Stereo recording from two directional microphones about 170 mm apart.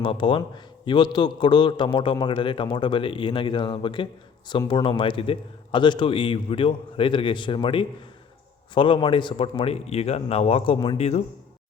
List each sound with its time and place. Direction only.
0.0 s a man's voice: 30° left (ahead or behind)